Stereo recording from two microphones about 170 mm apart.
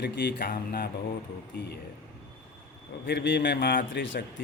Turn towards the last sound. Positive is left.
turn(degrees=90)